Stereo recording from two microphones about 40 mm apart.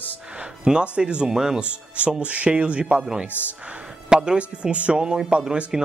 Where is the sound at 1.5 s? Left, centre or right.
Right.